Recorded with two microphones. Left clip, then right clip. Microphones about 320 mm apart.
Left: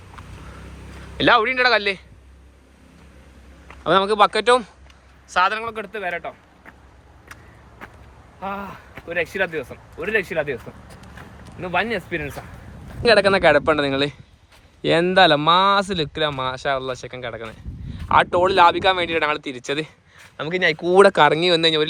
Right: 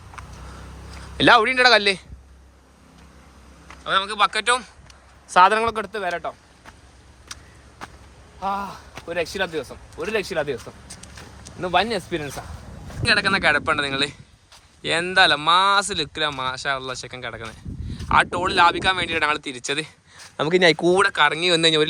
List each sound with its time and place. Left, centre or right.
1.1 s speech: centre
3.7 s speech: centre
5.3 s a man's voice: right
8.4 s speech: centre
11.6 s speech: centre
20.3 s speech: centre
20.9 s speech: centre